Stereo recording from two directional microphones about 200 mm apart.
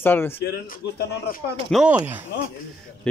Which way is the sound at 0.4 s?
55° left (ahead or behind).